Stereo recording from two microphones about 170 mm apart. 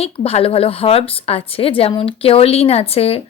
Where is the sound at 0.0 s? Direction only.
35° left (ahead or behind).